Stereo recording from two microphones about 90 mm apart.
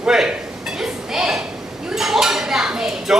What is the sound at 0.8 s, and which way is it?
Speech, 5° right (ahead or behind).